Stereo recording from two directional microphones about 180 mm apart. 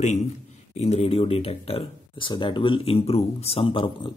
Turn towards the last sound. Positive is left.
turn(degrees=30)  # may be behind; listen again after turning